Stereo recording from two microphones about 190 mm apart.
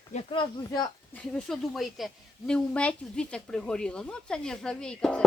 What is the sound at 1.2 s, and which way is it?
Speech, 5° left (ahead or behind).